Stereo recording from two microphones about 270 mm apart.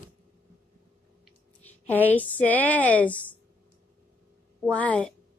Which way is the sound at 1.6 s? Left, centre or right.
Centre.